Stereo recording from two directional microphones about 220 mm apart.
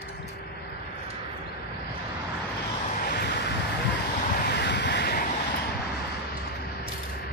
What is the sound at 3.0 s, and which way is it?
Vehicle, 45° left (ahead or behind).